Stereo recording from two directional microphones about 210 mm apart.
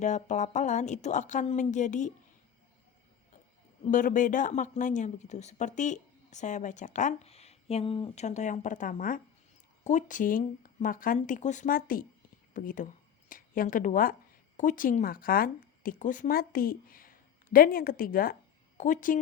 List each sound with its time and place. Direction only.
0.0 s speech: 35° left (ahead or behind)
3.9 s speech: 40° left (ahead or behind)